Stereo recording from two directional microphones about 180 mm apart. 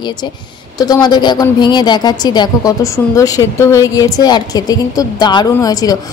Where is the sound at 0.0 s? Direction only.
25° left (ahead or behind).